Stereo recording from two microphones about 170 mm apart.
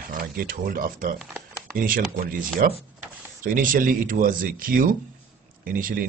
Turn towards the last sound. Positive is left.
turn(degrees=-55)  # may be behind; listen again after turning